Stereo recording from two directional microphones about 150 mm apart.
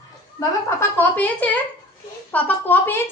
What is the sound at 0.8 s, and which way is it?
Speech, 15° left (ahead or behind).